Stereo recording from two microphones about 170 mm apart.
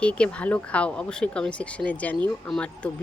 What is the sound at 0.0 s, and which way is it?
Speech, 5° left (ahead or behind).